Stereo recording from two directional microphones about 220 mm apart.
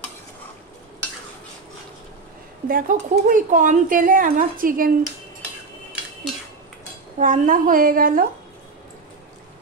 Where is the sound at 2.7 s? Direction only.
35° right (ahead or behind).